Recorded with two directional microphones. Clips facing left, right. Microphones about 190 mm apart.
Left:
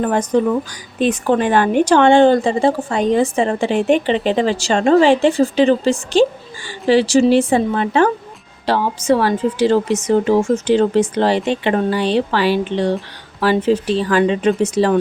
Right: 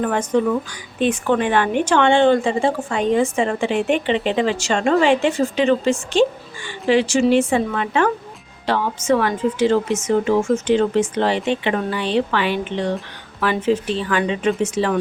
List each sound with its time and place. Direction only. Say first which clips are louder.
0.0 s a woman's voice: left 3 dB; 35° left (ahead or behind)